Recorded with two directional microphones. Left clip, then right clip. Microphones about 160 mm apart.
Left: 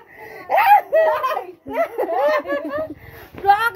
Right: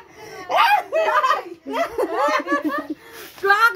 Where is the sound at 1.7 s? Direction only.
10° left (ahead or behind).